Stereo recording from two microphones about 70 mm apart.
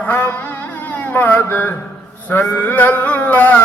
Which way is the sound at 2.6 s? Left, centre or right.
Left.